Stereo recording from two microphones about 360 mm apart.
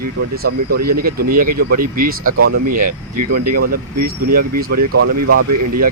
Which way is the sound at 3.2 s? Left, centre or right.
Right.